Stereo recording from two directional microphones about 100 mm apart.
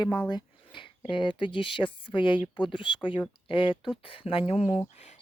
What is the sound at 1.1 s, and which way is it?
Speech, 55° left (ahead or behind).